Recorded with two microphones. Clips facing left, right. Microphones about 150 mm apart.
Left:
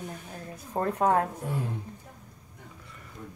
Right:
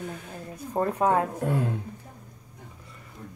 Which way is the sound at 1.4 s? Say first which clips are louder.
Right 6 dB; 65° right (ahead or behind).